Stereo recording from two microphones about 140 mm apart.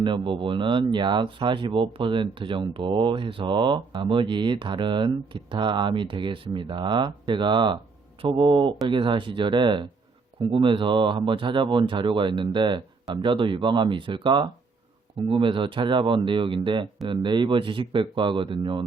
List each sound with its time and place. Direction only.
0.3 s speech: 35° right (ahead or behind)